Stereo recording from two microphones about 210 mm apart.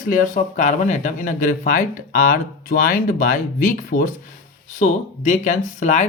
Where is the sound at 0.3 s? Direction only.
35° left (ahead or behind).